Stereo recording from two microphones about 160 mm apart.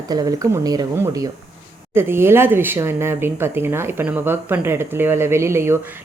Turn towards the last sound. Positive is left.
turn(degrees=-15)  # may be behind; listen again after turning